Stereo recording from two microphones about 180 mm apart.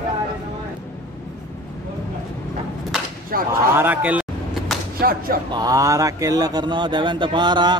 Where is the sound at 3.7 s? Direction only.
10° right (ahead or behind).